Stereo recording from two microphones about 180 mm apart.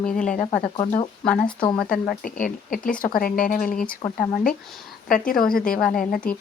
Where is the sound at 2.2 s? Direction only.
50° left (ahead or behind).